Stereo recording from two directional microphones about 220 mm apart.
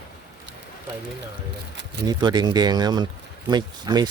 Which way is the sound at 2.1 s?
20° right (ahead or behind).